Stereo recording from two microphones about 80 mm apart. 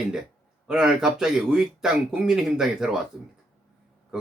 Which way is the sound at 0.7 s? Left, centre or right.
Centre.